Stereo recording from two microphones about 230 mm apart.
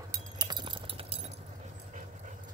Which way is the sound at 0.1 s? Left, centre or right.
Centre.